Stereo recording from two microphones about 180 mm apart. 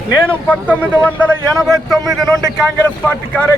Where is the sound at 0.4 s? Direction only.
10° left (ahead or behind).